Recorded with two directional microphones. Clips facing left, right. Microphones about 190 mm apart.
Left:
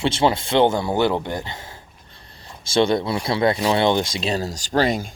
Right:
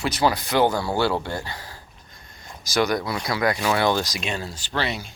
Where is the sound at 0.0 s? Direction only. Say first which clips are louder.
Left 3 dB; 25° left (ahead or behind); by 5.1 s 45° left (ahead or behind).